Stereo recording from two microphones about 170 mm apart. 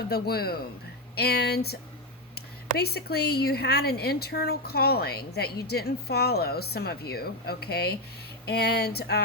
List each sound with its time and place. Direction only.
0.1 s speech: 65° left (ahead or behind)